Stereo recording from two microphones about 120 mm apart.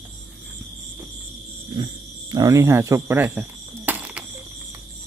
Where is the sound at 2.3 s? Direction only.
30° right (ahead or behind).